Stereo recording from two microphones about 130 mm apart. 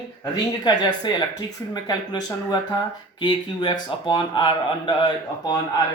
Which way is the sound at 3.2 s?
35° left (ahead or behind).